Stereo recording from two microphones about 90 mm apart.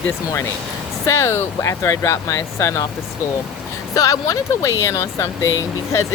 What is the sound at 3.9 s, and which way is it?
Speech, 40° left (ahead or behind).